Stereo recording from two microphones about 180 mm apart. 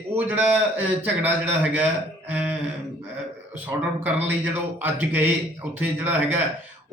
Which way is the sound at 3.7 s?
20° right (ahead or behind).